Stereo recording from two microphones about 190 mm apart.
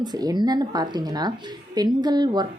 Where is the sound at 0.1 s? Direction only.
20° right (ahead or behind).